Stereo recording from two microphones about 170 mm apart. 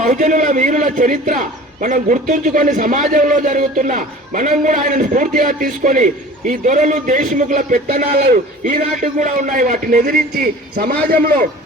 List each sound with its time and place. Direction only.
0.0 s a man's voice: 45° right (ahead or behind)